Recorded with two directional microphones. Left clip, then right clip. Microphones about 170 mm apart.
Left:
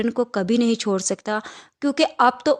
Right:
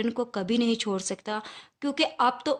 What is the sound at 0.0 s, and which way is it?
A woman's voice, 30° left (ahead or behind).